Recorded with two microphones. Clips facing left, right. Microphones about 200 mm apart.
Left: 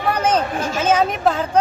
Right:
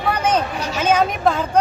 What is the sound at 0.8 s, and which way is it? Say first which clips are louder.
Speech: right 1 dB; 5° left (ahead or behind).